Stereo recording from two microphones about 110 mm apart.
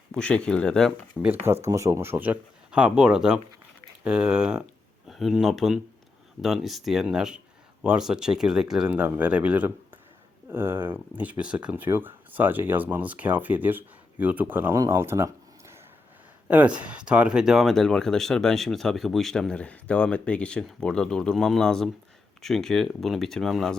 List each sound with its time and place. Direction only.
0.1 s speech: 10° left (ahead or behind)
1.2 s speech: 10° right (ahead or behind)
1.6 s speech: 25° right (ahead or behind)
16.5 s speech: 15° right (ahead or behind); by 23.7 s centre (ahead or behind)